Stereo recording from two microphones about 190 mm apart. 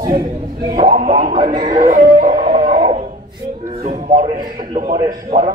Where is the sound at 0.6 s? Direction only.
25° right (ahead or behind).